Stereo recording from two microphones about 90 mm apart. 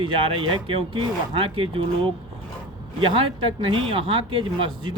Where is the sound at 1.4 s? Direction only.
80° right.